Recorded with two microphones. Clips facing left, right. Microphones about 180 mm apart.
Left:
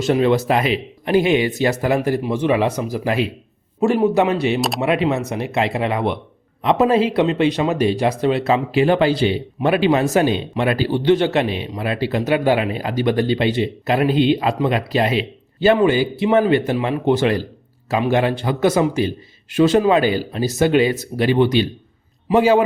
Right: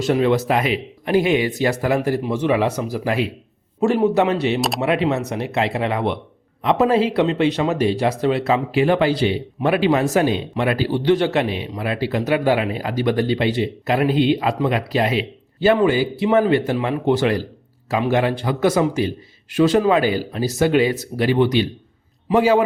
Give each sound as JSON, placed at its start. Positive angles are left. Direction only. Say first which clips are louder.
{"t": 0.0, "sound": "speech", "louder": "left 1 dB", "side_deg": 25}
{"t": 3.8, "sound": "speech", "louder": "left 1 dB", "side_deg": 10}